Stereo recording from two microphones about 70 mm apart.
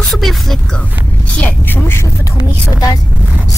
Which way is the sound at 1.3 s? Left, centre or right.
Left.